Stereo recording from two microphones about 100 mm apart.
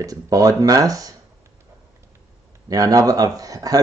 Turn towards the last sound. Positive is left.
turn(degrees=-35)  # may be behind; listen again after turning